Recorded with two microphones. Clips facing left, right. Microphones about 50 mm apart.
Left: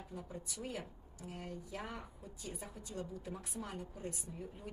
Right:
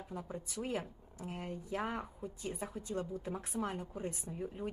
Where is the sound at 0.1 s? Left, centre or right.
Right.